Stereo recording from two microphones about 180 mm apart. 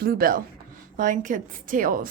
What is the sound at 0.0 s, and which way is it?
A woman's voice, 55° right (ahead or behind).